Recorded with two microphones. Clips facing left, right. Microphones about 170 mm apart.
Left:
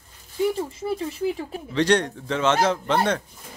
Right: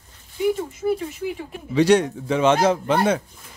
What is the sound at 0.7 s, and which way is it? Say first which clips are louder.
Speech: right 3 dB; 30° left (ahead or behind).